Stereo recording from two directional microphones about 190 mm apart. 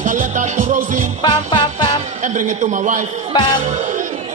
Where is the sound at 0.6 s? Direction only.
45° right (ahead or behind).